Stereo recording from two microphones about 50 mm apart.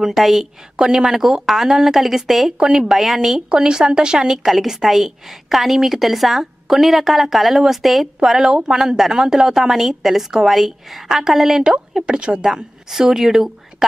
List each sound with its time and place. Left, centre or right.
0.0 s a woman's voice: centre
12.9 s a woman's voice: centre